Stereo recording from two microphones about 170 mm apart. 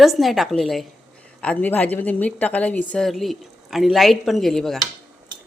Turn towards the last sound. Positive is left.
turn(degrees=0)  # may be behind; listen again after turning